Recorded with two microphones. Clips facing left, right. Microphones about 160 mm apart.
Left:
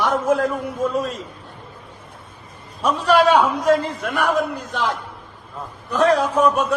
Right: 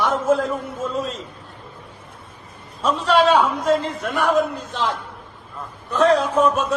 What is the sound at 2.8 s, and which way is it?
A man's voice, 5° left (ahead or behind).